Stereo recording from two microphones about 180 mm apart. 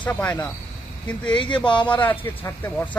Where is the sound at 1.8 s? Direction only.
10° left (ahead or behind).